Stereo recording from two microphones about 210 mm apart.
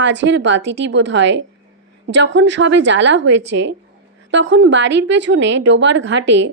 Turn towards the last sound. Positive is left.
turn(degrees=-60)  # may be behind; listen again after turning